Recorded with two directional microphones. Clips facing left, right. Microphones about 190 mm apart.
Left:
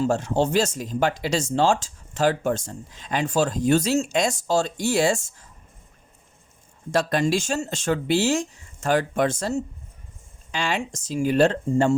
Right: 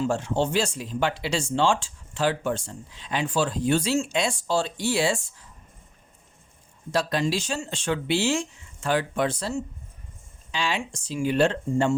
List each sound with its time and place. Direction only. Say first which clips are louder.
0.0 s speech: left 3 dB; 40° left (ahead or behind)
6.9 s speech: left 3 dB; 50° left (ahead or behind)